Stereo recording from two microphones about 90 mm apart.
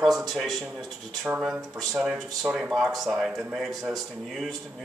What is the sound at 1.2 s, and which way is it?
Speech, 10° right (ahead or behind).